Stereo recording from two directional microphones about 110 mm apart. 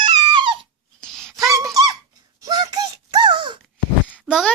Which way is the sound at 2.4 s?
40° right (ahead or behind).